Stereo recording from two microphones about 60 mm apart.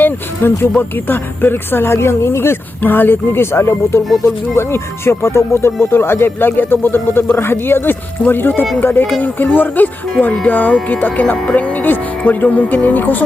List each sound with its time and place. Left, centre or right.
0.0 s speech: left